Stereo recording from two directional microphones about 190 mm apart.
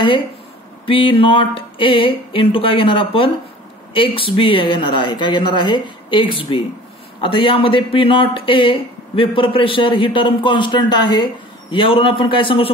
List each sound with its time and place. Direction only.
0.8 s speech: 25° left (ahead or behind)